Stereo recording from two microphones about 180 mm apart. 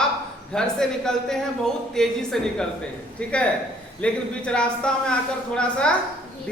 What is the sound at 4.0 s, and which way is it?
A man's voice, 5° left (ahead or behind).